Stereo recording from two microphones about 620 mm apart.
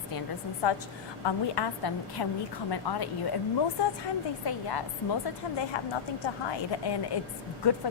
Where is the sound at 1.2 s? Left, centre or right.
Left.